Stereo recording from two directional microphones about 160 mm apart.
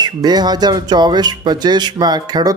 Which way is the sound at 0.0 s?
25° right (ahead or behind).